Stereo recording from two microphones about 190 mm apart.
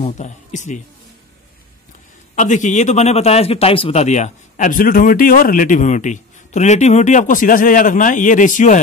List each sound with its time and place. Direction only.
0.0 s speech: 40° left (ahead or behind)
2.3 s speech: 40° left (ahead or behind)